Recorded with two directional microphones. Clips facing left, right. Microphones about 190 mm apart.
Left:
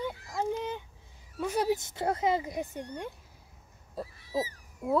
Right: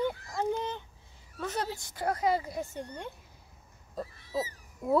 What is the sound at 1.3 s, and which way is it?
Speech, 10° left (ahead or behind).